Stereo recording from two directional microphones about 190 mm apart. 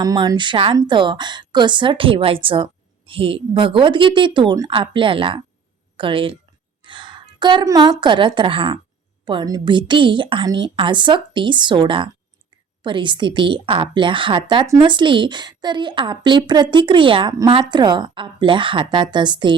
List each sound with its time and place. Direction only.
0.0 s a woman's voice: 20° right (ahead or behind)